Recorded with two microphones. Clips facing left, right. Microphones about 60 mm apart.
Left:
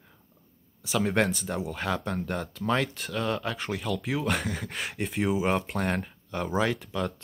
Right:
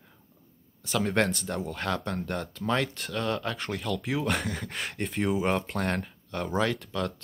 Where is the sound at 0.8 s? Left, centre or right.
Centre.